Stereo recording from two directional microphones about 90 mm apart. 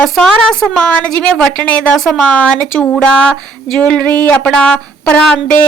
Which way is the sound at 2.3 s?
20° left (ahead or behind).